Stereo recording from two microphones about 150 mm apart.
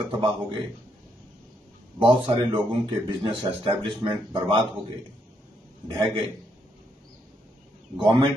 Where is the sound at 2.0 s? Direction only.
35° right (ahead or behind).